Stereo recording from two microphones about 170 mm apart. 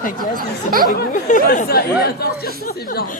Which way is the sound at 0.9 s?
55° left (ahead or behind).